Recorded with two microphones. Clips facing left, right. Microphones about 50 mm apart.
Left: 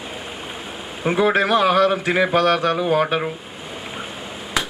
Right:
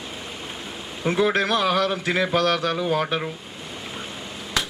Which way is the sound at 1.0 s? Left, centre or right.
Centre.